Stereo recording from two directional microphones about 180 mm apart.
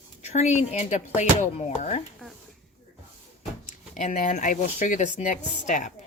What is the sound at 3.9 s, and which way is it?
Speech, 45° left (ahead or behind).